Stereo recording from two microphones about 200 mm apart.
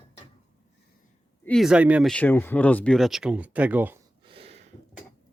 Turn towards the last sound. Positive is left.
turn(degrees=-30)  # may be behind; listen again after turning